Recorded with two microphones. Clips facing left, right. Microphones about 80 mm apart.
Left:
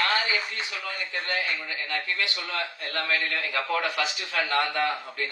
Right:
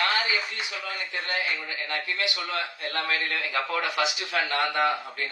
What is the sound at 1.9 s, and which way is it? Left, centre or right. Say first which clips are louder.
A man's voice: even; right.